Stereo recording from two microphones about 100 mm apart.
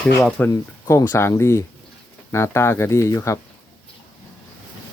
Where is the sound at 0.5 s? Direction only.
30° left (ahead or behind).